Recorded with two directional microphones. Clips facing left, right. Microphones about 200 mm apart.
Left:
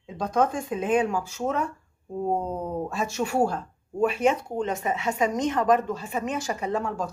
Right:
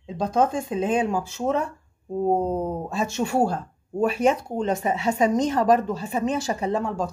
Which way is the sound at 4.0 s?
40° right (ahead or behind).